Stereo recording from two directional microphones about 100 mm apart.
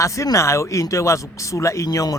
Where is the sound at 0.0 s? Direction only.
30° left (ahead or behind).